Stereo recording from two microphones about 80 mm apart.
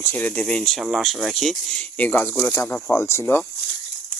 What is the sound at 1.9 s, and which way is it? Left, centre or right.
Speech, left.